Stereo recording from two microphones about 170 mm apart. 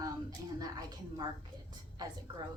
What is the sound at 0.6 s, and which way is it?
A woman's voice, 20° right (ahead or behind).